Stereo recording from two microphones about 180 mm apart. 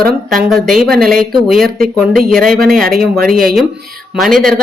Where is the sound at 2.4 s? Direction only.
55° right (ahead or behind).